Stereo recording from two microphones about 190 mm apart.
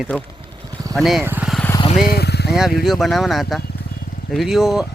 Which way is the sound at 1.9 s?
50° left (ahead or behind).